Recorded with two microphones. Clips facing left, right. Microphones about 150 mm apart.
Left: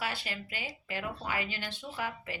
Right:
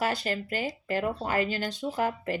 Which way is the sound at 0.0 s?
45° right (ahead or behind).